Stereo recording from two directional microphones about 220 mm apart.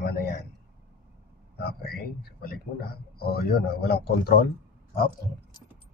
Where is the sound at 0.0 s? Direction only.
45° left (ahead or behind).